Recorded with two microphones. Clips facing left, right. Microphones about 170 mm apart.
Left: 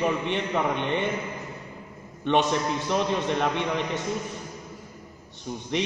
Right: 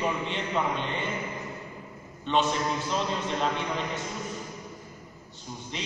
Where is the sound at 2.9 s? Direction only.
60° left (ahead or behind).